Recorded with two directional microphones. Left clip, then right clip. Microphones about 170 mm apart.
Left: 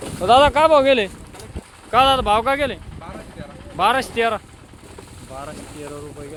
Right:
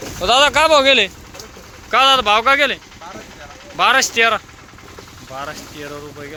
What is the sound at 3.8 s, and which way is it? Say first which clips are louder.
Speech: right 4 dB; 20° left (ahead or behind).